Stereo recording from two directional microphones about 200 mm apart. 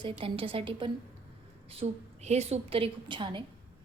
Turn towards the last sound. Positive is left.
turn(degrees=-25)  # may be behind; listen again after turning